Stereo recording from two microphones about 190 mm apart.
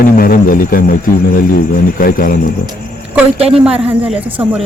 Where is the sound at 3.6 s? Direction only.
5° right (ahead or behind).